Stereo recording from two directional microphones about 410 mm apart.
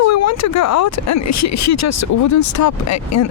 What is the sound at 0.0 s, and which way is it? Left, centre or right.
Speech, left.